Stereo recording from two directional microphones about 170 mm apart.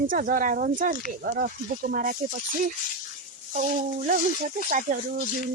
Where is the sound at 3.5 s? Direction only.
50° right (ahead or behind).